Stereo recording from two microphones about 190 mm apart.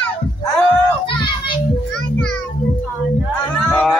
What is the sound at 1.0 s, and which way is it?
Child singing, 25° left (ahead or behind).